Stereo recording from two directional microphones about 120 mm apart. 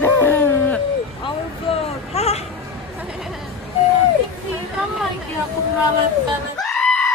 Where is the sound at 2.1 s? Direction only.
65° left (ahead or behind).